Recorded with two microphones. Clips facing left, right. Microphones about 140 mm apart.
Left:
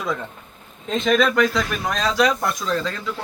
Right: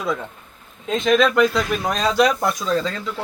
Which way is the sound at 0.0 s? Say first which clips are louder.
Right 2 dB; 5° right (ahead or behind).